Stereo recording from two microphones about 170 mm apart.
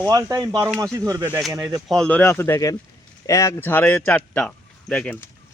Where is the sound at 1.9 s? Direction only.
5° left (ahead or behind).